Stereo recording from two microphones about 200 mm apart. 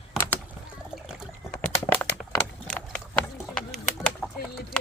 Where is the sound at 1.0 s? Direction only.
5° left (ahead or behind).